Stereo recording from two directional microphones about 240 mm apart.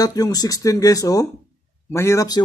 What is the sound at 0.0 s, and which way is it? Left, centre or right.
Speech, centre.